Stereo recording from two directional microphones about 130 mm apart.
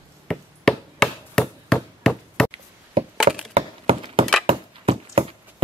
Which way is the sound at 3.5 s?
45° right (ahead or behind).